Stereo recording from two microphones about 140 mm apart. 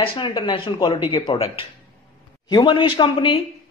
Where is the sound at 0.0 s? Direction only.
40° left (ahead or behind).